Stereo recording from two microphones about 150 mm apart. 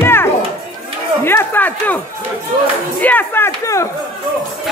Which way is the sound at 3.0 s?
15° left (ahead or behind).